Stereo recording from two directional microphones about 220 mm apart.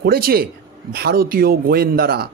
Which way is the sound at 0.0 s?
45° right (ahead or behind).